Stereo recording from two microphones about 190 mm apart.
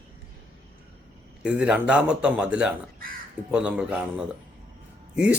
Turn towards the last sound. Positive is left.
turn(degrees=-5)  # may be behind; listen again after turning